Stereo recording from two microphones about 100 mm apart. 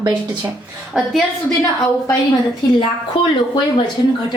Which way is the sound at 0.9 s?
5° right (ahead or behind).